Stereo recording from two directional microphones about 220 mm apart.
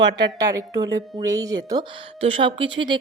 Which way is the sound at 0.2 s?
15° right (ahead or behind).